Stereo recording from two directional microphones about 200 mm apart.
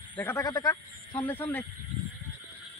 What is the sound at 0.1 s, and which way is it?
A man's voice, 10° left (ahead or behind).